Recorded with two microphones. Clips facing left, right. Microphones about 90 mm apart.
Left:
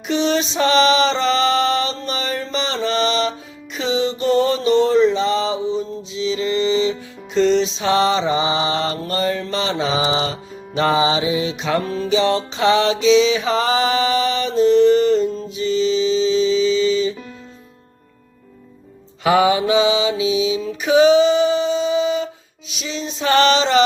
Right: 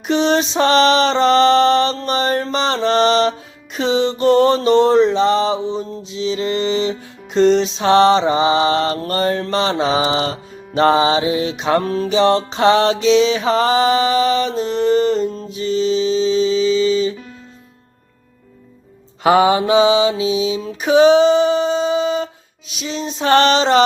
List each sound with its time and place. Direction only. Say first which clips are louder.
0.1 s music: right 3 dB; 45° right (ahead or behind)
3.8 s mantra: right 3 dB; 50° right (ahead or behind)
11.6 s music: right 4 dB; 45° right (ahead or behind)
19.2 s mantra: right 2 dB; 40° right (ahead or behind)